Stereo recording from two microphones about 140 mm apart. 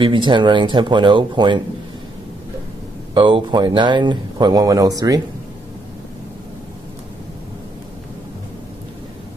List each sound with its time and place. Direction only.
0.0 s speech: 35° right (ahead or behind)
3.2 s speech: 35° right (ahead or behind)